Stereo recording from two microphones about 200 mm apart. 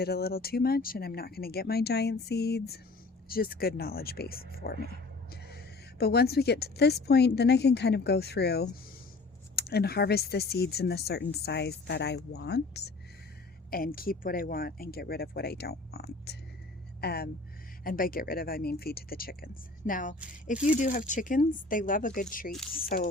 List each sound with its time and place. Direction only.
0.0 s speech: 50° left (ahead or behind)
20.1 s speech: 5° right (ahead or behind)
20.7 s speech: 40° left (ahead or behind)